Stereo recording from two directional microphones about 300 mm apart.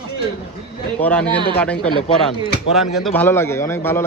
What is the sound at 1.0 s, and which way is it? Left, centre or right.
A man's voice, centre.